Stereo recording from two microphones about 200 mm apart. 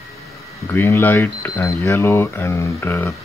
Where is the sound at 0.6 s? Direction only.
10° left (ahead or behind).